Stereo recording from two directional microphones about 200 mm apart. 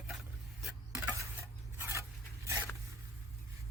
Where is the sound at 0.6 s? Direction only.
5° right (ahead or behind).